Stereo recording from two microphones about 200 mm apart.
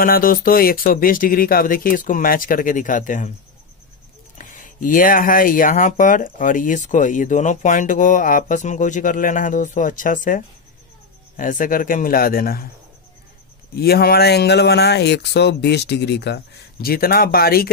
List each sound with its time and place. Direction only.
0.0 s speech: 45° left (ahead or behind)
4.4 s speech: 40° left (ahead or behind)
13.7 s speech: 50° left (ahead or behind)